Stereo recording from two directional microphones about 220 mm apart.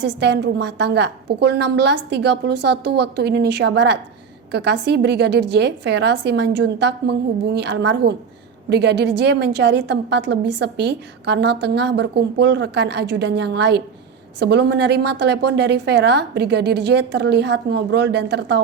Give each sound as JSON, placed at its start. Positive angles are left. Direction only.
{"t": 0.0, "sound": "a woman's voice", "side_deg": -50}